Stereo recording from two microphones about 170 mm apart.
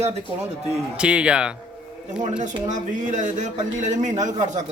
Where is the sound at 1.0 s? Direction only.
5° right (ahead or behind).